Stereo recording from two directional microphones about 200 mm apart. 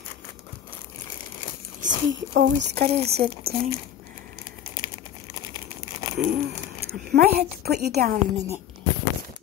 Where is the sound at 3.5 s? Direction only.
50° right (ahead or behind).